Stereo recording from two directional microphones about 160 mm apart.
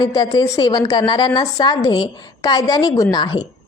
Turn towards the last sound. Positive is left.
turn(degrees=25)  # may be behind; listen again after turning